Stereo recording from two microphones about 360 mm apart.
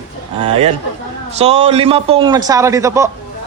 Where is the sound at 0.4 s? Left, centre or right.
Centre.